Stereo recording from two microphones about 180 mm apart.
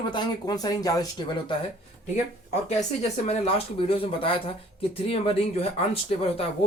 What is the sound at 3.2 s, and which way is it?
Speech, 30° left (ahead or behind).